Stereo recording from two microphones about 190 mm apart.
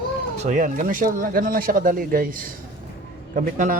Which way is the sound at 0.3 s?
40° right (ahead or behind).